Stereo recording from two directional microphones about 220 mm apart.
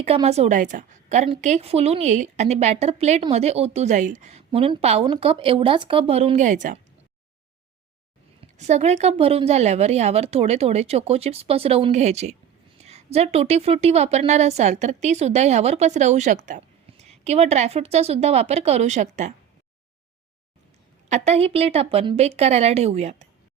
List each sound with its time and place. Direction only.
0.0 s a woman's voice: 25° right (ahead or behind)
8.4 s a woman's voice: 30° right (ahead or behind)
21.1 s a woman's voice: 30° right (ahead or behind)